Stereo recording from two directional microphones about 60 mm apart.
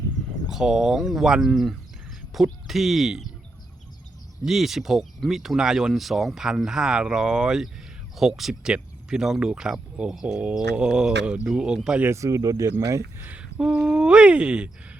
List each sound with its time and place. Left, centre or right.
0.4 s speech: centre
4.4 s speech: centre
12.1 s speech: right
13.1 s a sound: right
13.9 s speech: centre